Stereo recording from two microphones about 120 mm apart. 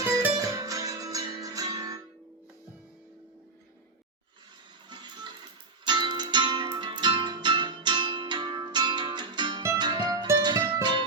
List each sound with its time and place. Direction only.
0.3 s music: 30° right (ahead or behind)
5.8 s music: 40° right (ahead or behind)